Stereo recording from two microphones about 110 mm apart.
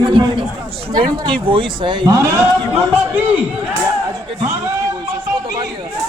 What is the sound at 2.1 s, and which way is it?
A man's voice, 25° right (ahead or behind).